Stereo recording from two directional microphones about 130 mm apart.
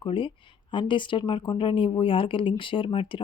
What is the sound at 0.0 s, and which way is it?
Speech, 40° left (ahead or behind).